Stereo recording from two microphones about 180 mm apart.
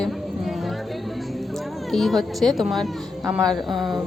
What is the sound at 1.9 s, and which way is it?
Speech, centre (ahead or behind).